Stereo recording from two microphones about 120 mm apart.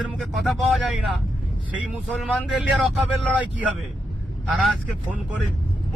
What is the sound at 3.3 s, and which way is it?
Speech, 10° right (ahead or behind).